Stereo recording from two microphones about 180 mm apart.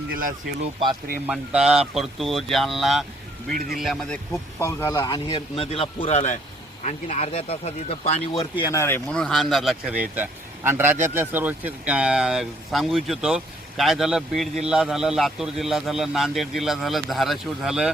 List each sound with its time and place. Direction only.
0.1 s speech: 50° right (ahead or behind)
1.3 s speech: 5° right (ahead or behind)
4.3 s speech: 15° left (ahead or behind); by 8.6 s 30° left (ahead or behind)
8.6 s speech: 15° left (ahead or behind)
9.2 s speech: centre (ahead or behind)